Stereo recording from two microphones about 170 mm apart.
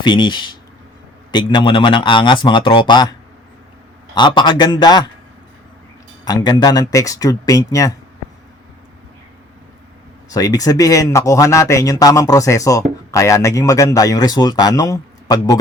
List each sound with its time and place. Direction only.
0.0 s a man's voice: 25° left (ahead or behind)
4.1 s a man's voice: 25° left (ahead or behind)
6.2 s a man's voice: 25° left (ahead or behind)
10.3 s a man's voice: 20° left (ahead or behind)